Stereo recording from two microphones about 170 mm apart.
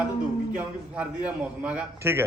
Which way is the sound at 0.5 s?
5° right (ahead or behind).